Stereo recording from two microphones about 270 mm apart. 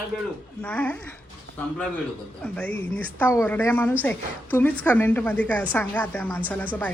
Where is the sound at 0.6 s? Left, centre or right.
Centre.